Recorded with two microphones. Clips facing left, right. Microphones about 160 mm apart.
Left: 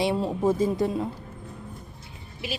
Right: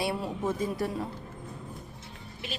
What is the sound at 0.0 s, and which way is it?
Speech, 20° left (ahead or behind).